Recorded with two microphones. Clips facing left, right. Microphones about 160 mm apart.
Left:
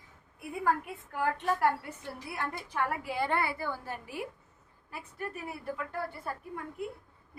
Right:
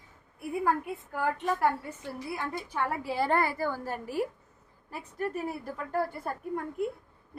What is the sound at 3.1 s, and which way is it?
A woman's voice, 40° right (ahead or behind).